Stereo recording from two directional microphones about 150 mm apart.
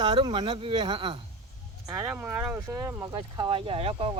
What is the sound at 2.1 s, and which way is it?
Speech, 10° right (ahead or behind).